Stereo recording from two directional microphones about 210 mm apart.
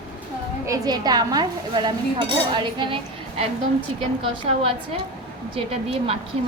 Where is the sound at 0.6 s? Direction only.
15° right (ahead or behind).